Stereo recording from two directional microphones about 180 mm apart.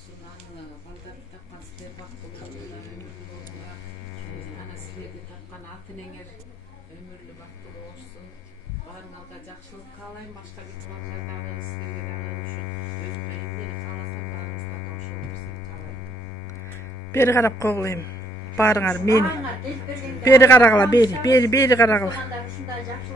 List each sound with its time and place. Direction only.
17.1 s a man's voice: 15° left (ahead or behind)
20.2 s a man's voice: 15° left (ahead or behind)